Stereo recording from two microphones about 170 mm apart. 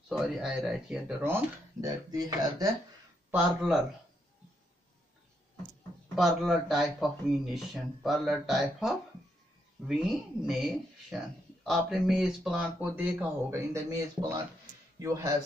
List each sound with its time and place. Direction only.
0.1 s speech: centre (ahead or behind); by 2.7 s 20° right (ahead or behind)
3.3 s speech: 10° right (ahead or behind)
6.1 s speech: centre (ahead or behind); by 15.3 s 20° right (ahead or behind)